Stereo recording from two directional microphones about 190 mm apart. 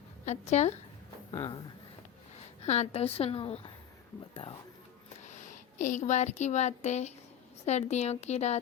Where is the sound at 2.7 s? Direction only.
35° left (ahead or behind).